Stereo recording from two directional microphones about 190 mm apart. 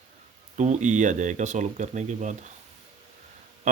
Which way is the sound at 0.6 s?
40° right (ahead or behind).